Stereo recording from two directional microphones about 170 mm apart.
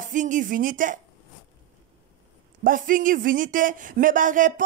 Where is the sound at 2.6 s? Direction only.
50° right (ahead or behind).